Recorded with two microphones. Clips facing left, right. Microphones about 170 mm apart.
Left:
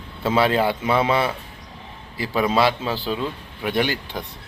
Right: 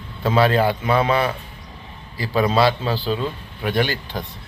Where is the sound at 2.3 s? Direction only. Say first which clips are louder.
Right 2 dB; 15° left (ahead or behind).